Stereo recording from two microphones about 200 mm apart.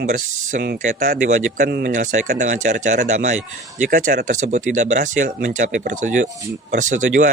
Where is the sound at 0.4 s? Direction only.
45° right (ahead or behind).